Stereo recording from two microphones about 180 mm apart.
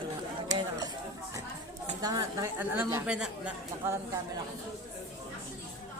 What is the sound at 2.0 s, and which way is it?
A woman's voice, 20° right (ahead or behind).